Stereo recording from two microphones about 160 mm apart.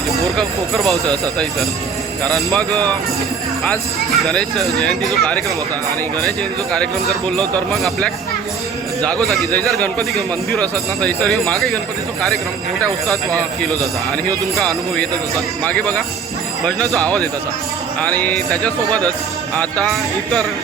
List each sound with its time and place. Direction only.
0.3 s speech: centre (ahead or behind)
2.2 s speech: centre (ahead or behind)
4.1 s speech: centre (ahead or behind)
7.1 s speech: 5° left (ahead or behind)
12.8 s speech: 5° left (ahead or behind)
14.5 s speech: centre (ahead or behind)